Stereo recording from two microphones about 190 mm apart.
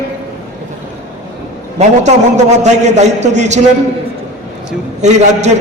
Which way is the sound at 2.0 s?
40° right (ahead or behind).